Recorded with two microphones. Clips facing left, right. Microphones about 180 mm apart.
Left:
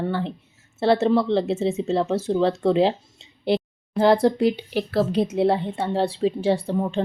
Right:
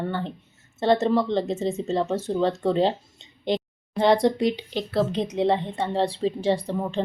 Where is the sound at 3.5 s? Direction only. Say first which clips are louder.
Left 3 dB; 5° left (ahead or behind).